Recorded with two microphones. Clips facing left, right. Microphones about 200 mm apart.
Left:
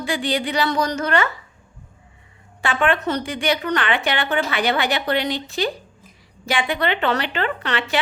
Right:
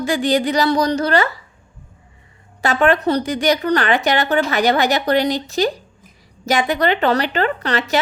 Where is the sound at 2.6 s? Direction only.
40° right (ahead or behind).